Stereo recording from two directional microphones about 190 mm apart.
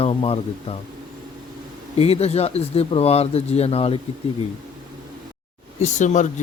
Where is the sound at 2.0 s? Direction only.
35° left (ahead or behind).